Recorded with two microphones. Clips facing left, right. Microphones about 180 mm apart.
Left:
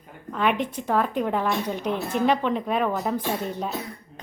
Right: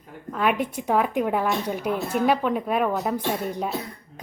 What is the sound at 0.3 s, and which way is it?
A woman's voice, 5° right (ahead or behind).